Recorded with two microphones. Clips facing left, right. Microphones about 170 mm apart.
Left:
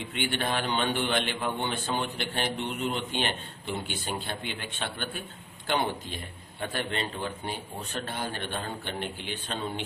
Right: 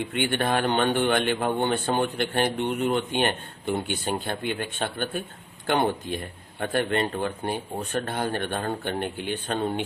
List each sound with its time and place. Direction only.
0.1 s a man's voice: 55° right (ahead or behind)